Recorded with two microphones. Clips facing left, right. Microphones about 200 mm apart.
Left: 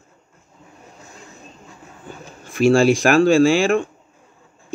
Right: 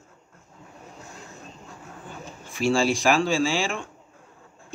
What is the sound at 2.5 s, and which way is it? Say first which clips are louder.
Speech: left 8 dB; 55° left (ahead or behind).